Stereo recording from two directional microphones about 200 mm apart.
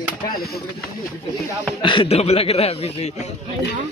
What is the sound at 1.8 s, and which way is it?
Speech, 25° left (ahead or behind).